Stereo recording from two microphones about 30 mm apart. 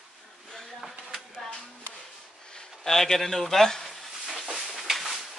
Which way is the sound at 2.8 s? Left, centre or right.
Centre.